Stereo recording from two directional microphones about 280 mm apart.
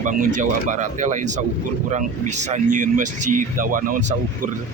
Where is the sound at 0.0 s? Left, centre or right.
Right.